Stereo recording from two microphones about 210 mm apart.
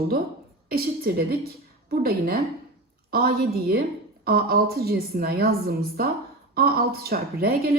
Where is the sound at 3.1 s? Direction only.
45° right (ahead or behind).